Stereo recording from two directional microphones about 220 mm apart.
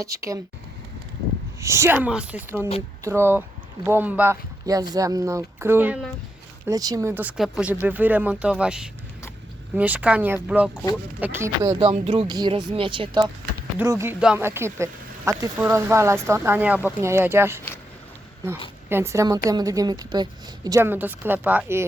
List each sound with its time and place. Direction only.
0.0 s speech: 15° right (ahead or behind)
1.6 s speech: 10° right (ahead or behind)
11.8 s speech: 25° right (ahead or behind); by 17.6 s 10° right (ahead or behind)
18.9 s speech: 10° right (ahead or behind)